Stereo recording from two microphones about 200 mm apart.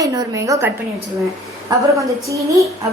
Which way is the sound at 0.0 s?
15° right (ahead or behind).